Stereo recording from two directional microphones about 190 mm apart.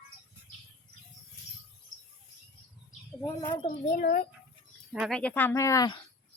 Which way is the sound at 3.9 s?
45° left (ahead or behind).